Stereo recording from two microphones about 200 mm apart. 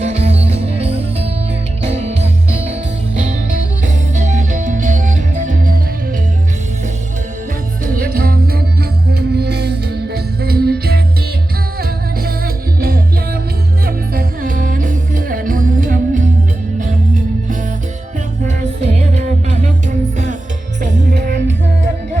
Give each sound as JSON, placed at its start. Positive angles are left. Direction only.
{"t": 0.0, "sound": "music", "side_deg": -30}
{"t": 7.9, "sound": "music", "side_deg": -45}
{"t": 13.8, "sound": "music", "side_deg": -45}
{"t": 21.1, "sound": "music", "side_deg": -60}